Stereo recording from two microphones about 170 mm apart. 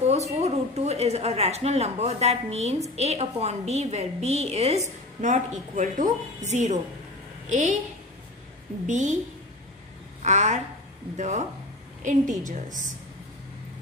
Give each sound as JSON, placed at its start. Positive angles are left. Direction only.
{"t": 0.4, "sound": "a woman's voice", "side_deg": -40}
{"t": 8.8, "sound": "a woman's voice", "side_deg": -45}
{"t": 10.2, "sound": "a woman's voice", "side_deg": -45}